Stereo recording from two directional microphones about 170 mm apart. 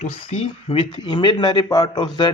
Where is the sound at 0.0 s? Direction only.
40° left (ahead or behind).